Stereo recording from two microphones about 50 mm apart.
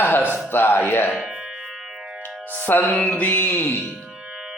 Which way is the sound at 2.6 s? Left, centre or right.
Left.